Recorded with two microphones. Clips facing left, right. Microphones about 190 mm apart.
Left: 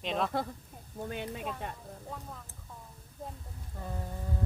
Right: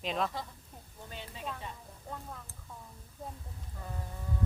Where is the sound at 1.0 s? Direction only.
55° left (ahead or behind).